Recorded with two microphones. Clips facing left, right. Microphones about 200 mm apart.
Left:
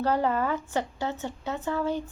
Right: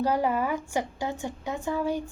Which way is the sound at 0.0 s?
10° right (ahead or behind).